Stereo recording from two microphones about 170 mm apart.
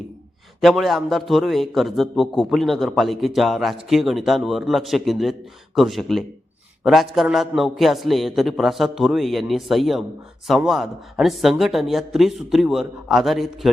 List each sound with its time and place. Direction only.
0.6 s a man's voice: centre (ahead or behind)